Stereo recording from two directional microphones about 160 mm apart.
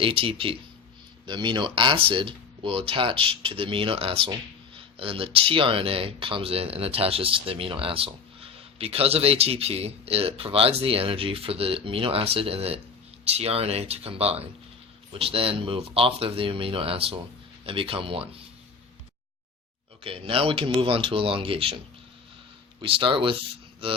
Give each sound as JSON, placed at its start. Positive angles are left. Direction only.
{"t": 0.0, "sound": "speech", "side_deg": -35}
{"t": 20.1, "sound": "speech", "side_deg": -35}
{"t": 22.8, "sound": "speech", "side_deg": -30}